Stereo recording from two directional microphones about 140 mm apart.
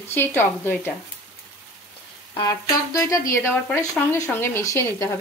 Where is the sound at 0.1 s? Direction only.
15° left (ahead or behind).